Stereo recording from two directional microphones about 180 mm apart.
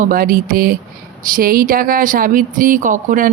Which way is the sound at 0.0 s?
50° right (ahead or behind).